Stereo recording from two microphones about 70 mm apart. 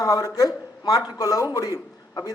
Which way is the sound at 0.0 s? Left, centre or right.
Left.